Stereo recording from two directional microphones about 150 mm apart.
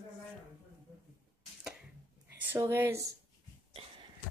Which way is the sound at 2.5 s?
20° right (ahead or behind).